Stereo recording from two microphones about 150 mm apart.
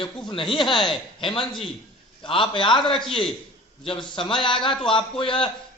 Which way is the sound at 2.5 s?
35° left (ahead or behind).